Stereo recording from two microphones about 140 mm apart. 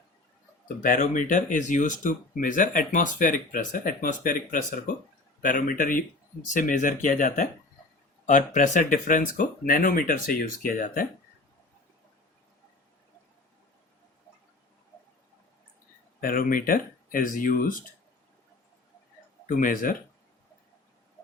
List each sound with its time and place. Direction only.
0.8 s speech: 70° left (ahead or behind)
16.2 s speech: 90° left; by 17.7 s 75° left (ahead or behind)
19.5 s speech: 75° left (ahead or behind)